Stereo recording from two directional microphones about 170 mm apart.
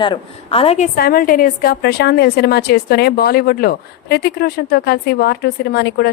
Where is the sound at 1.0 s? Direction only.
60° left (ahead or behind); by 6.1 s 80° left.